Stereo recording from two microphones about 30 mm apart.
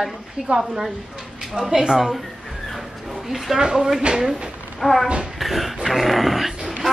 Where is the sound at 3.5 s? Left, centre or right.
Right.